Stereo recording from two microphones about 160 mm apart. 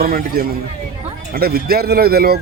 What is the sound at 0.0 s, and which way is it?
A man's voice, 70° right (ahead or behind).